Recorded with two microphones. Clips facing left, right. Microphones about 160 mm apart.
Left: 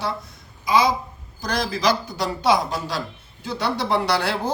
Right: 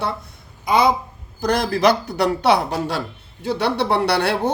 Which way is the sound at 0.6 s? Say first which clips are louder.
Right 2 dB; 60° right (ahead or behind).